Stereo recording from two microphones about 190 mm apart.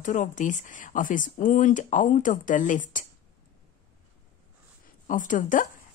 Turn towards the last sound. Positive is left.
turn(degrees=45)  # may be behind; listen again after turning